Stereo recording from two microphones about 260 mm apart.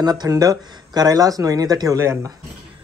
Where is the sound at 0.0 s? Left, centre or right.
Centre.